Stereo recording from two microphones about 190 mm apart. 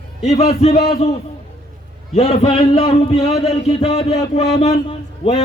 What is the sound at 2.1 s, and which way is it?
A man's voice, 30° left (ahead or behind).